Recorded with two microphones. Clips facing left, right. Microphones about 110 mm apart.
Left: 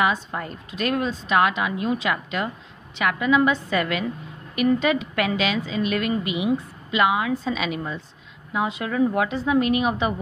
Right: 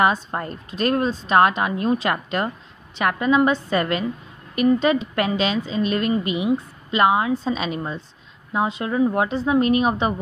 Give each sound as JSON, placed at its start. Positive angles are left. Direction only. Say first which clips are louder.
{"t": 0.0, "sound": "a woman's voice", "louder": "right 3 dB", "side_deg": -40}